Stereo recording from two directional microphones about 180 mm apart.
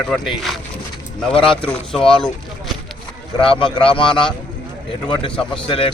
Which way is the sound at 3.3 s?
30° left (ahead or behind).